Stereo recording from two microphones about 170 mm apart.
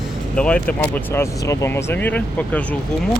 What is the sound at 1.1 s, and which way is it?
Speech, 15° left (ahead or behind).